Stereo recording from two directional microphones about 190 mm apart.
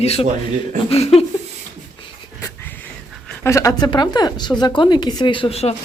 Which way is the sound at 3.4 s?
15° left (ahead or behind).